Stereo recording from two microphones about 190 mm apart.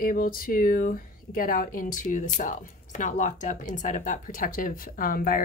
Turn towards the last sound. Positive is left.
turn(degrees=50)  # may be behind; listen again after turning